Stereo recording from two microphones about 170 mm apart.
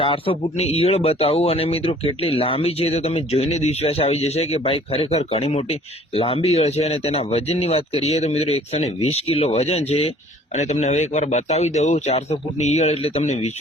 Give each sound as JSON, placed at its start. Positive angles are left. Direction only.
{"t": 0.0, "sound": "speech", "side_deg": 35}